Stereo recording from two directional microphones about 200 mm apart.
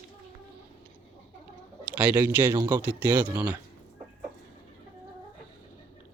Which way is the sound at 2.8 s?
5° right (ahead or behind).